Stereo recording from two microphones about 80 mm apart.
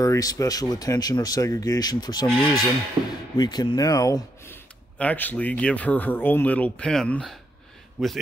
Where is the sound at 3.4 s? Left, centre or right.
Left.